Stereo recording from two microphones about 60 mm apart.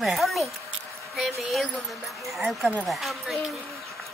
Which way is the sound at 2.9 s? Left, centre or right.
Centre.